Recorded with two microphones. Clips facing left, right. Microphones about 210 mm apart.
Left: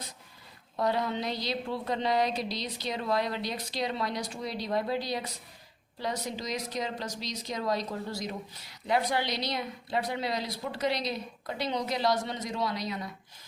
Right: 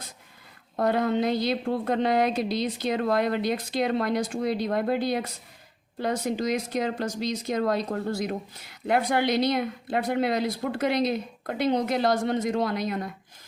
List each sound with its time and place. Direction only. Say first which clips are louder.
0.8 s a woman's voice: right 6 dB; 55° right (ahead or behind)